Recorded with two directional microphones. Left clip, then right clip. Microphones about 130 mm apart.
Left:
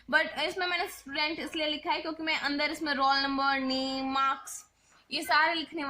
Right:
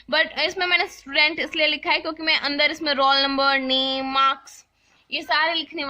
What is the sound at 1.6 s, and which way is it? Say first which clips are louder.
A woman's voice: right 10 dB; 30° right (ahead or behind).